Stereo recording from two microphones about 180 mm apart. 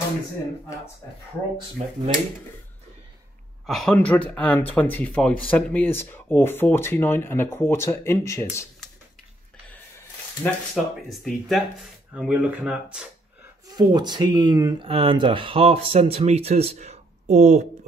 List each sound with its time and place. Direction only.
1.8 s speech: 40° right (ahead or behind)
3.6 s speech: centre (ahead or behind)
10.4 s speech: centre (ahead or behind)
13.7 s speech: 25° right (ahead or behind); by 17.6 s 40° right (ahead or behind)